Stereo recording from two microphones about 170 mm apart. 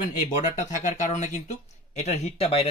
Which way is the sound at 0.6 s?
45° left (ahead or behind).